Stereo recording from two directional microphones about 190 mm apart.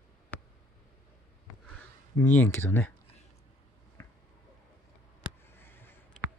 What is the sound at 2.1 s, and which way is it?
Speech, 10° left (ahead or behind).